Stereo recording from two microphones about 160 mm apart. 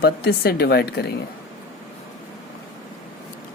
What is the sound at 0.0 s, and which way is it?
Speech, 70° left (ahead or behind).